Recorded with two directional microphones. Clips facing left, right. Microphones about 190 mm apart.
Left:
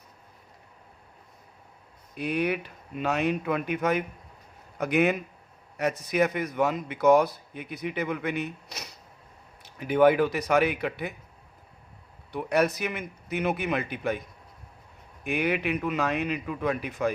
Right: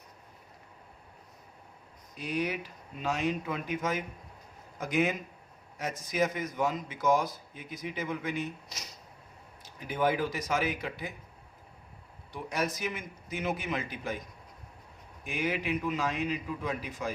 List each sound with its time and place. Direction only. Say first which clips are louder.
2.1 s a man's voice: left 5 dB; 60° left (ahead or behind)
12.3 s a man's voice: left 8 dB; 65° left (ahead or behind)
15.2 s a man's voice: left 6 dB; 65° left (ahead or behind)